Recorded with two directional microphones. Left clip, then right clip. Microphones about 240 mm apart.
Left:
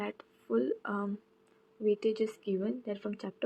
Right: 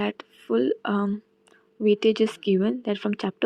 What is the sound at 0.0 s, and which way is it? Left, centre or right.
Speech, right.